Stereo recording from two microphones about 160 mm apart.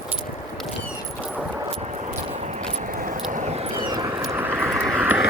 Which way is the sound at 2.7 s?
50° right (ahead or behind).